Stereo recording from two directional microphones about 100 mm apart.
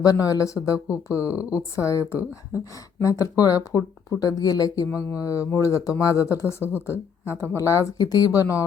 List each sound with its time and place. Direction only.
0.0 s speech: 35° left (ahead or behind)
4.9 s speech: 30° left (ahead or behind)